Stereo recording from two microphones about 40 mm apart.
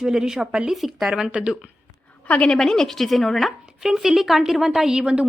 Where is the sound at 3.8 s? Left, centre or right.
Centre.